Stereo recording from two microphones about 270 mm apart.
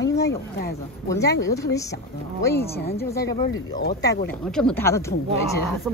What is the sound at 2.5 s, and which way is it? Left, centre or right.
A woman's voice, left.